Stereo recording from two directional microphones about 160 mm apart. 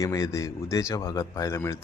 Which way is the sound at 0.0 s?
20° left (ahead or behind).